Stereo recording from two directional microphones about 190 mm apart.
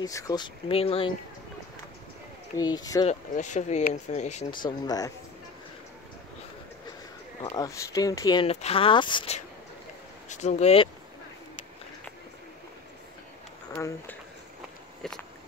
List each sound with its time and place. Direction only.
0.0 s speech: 20° left (ahead or behind)
2.5 s speech: 20° left (ahead or behind)
3.1 s speech: 40° left (ahead or behind)
4.6 s speech: 20° left (ahead or behind)
7.4 s speech: 20° left (ahead or behind)
10.3 s speech: 40° left (ahead or behind)
13.7 s speech: 10° left (ahead or behind)
15.0 s a sound: 5° left (ahead or behind)